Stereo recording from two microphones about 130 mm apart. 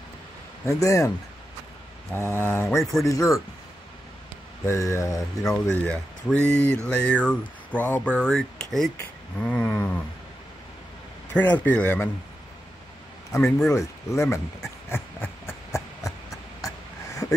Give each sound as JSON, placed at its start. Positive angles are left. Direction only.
{"t": 0.7, "sound": "speech", "side_deg": 25}
{"t": 2.1, "sound": "speech", "side_deg": 20}
{"t": 4.6, "sound": "speech", "side_deg": 20}
{"t": 5.5, "sound": "speech", "side_deg": 5}
{"t": 11.3, "sound": "speech", "side_deg": 10}
{"t": 13.4, "sound": "speech", "side_deg": 5}
{"t": 13.7, "sound": "speech", "side_deg": 20}
{"t": 14.9, "sound": "a sound", "side_deg": 20}